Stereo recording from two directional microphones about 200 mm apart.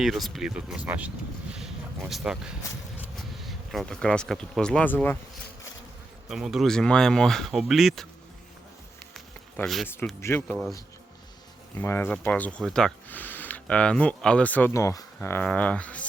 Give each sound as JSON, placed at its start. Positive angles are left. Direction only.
{"t": 0.0, "sound": "speech", "side_deg": 0}
{"t": 9.1, "sound": "a sound", "side_deg": 0}
{"t": 10.2, "sound": "speech", "side_deg": 10}
{"t": 11.8, "sound": "speech", "side_deg": 10}